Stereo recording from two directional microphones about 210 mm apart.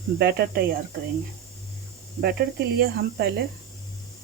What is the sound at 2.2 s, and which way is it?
Speech, 45° right (ahead or behind).